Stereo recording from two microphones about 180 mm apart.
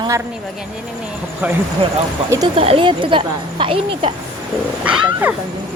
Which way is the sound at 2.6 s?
30° right (ahead or behind).